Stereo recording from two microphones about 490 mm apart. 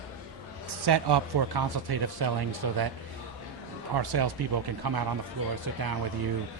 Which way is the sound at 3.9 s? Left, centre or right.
Right.